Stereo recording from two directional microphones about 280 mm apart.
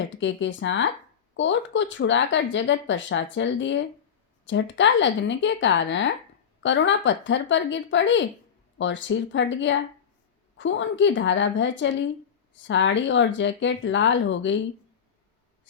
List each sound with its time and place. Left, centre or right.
0.2 s speech: left